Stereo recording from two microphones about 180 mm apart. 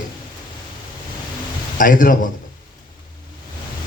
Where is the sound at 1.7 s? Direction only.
50° left (ahead or behind).